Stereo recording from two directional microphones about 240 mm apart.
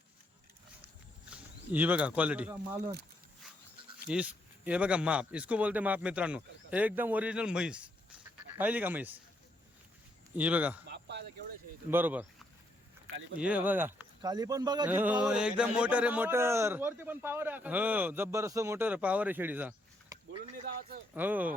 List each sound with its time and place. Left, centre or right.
1.3 s speech: centre
4.1 s a man's voice: centre
10.3 s a man's voice: centre
10.8 s a sound: right
11.9 s a man's voice: centre
21.2 s a man's voice: centre